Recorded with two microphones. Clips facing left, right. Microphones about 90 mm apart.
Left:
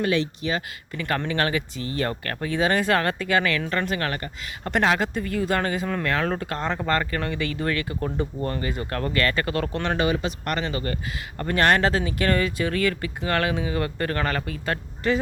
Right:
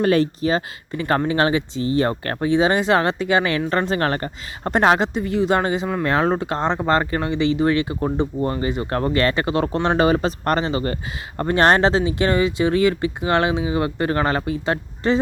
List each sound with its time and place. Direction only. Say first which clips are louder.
0.0 s speech: right 6 dB; 40° right (ahead or behind)